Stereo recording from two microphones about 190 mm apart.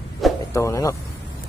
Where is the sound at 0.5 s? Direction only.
15° left (ahead or behind).